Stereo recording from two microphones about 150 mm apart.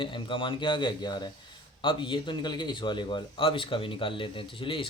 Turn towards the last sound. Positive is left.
turn(degrees=35)  # may be behind; listen again after turning